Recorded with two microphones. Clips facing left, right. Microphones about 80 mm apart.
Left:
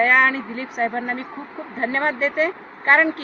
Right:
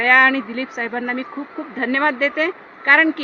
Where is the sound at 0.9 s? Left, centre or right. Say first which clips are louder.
Right 2 dB; right.